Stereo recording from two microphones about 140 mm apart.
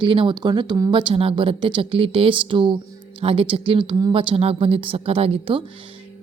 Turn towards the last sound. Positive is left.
turn(degrees=-40)  # may be behind; listen again after turning